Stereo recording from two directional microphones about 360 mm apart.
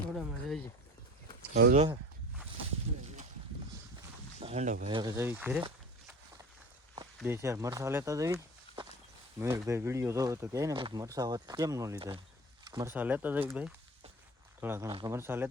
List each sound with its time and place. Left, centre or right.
0.1 s speech: centre
1.5 s speech: right
4.4 s speech: centre
7.2 s speech: centre